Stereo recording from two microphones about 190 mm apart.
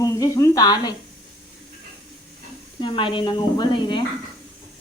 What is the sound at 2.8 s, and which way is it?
Speech, 25° left (ahead or behind).